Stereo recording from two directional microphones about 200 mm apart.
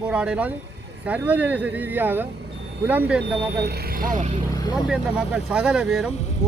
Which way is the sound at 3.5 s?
55° right (ahead or behind).